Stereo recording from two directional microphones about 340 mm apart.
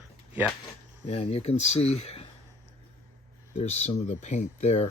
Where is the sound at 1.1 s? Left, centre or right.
Centre.